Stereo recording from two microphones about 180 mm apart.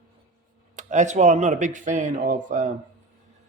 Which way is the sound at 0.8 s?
40° right (ahead or behind).